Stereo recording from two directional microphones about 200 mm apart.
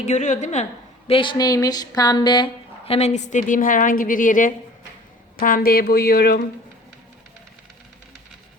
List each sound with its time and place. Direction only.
0.0 s a woman's voice: 35° left (ahead or behind); by 6.4 s 50° left (ahead or behind)